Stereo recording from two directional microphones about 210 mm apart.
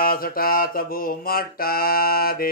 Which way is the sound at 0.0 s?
45° left (ahead or behind).